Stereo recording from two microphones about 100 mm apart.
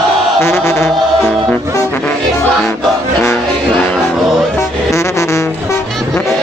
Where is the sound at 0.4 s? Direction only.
25° left (ahead or behind).